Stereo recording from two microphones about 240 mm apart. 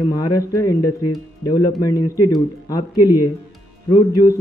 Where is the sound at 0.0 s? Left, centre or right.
Centre.